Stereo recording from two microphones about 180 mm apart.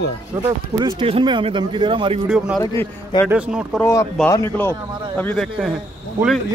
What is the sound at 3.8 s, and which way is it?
A man's voice, 15° left (ahead or behind).